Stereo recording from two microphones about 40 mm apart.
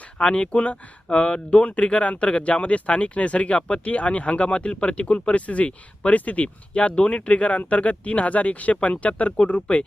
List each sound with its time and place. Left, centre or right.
0.2 s speech: left